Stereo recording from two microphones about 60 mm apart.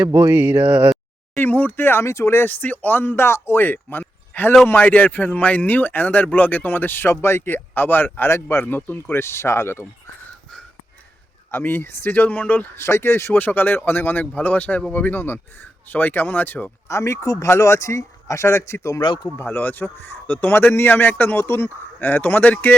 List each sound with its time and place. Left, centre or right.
0.3 s speech: right
1.4 s speech: left
2.0 s speech: left
11.5 s speech: left
12.7 s speech: left
13.4 s speech: left
16.9 s speech: left
17.4 s speech: left
19.4 s speech: left
21.3 s speech: left
21.9 s speech: left